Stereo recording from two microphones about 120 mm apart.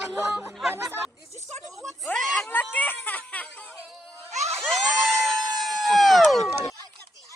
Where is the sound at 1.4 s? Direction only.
70° right (ahead or behind).